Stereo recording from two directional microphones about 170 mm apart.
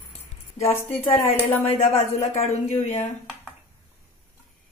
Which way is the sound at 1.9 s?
40° left (ahead or behind).